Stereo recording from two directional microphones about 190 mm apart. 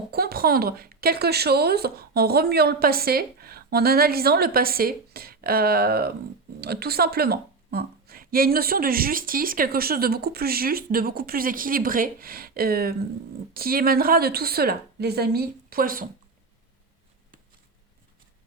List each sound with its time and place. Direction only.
0.1 s a woman's voice: 55° right (ahead or behind)